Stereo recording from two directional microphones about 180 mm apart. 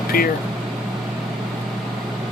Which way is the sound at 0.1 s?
55° left (ahead or behind).